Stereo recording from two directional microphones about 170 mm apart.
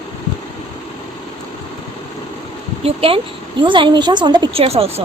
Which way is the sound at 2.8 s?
35° right (ahead or behind).